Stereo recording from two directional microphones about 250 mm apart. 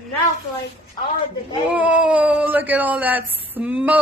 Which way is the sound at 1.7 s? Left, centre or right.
Centre.